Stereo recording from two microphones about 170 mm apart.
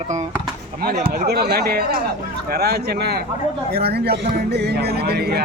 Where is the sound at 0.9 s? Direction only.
60° right (ahead or behind).